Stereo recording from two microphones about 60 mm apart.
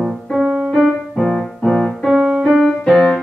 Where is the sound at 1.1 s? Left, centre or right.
Centre.